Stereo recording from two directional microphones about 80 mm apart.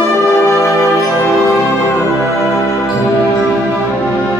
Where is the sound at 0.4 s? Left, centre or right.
Left.